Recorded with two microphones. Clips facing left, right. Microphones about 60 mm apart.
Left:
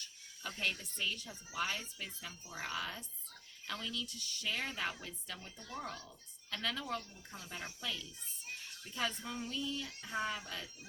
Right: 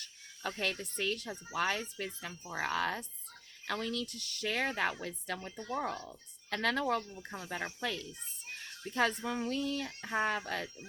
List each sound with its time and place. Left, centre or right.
0.0 s speech: right
1.5 s speech: right
6.6 s speech: right
8.4 s a sound: right
8.9 s speech: right